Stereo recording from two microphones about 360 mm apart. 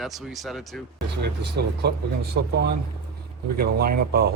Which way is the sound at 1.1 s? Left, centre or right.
Right.